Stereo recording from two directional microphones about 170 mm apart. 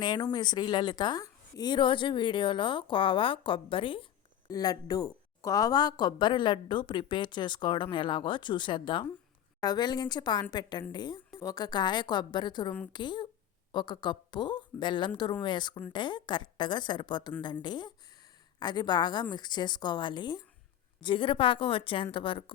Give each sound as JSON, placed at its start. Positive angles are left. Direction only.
{"t": 0.0, "sound": "a woman's voice", "side_deg": 25}